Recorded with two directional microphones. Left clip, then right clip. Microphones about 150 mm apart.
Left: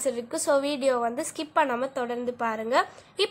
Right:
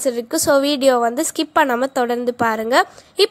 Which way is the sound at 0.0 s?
45° right (ahead or behind).